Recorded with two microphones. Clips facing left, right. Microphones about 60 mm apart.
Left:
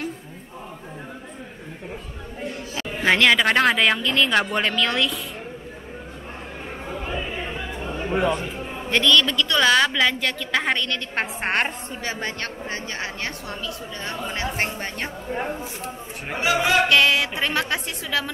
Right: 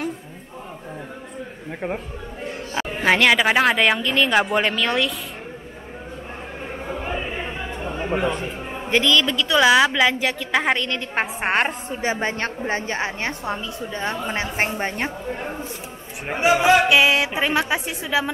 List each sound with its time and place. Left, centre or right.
2.7 s speech: centre
6.9 s choir: centre
7.5 s chatter: centre
8.9 s a woman's voice: centre
12.0 s a woman's voice: right
16.3 s a woman's voice: right
16.6 s a woman's voice: centre